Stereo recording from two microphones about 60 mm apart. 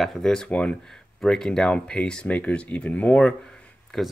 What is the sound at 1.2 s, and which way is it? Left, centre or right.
Speech, centre.